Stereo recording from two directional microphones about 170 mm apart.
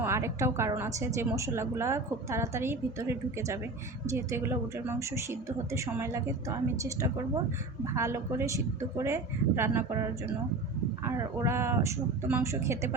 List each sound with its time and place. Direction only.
0.0 s a woman's voice: 15° right (ahead or behind)
11.0 s a woman's voice: 20° right (ahead or behind)